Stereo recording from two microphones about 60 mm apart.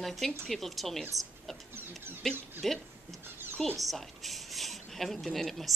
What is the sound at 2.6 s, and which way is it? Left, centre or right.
Speech, centre.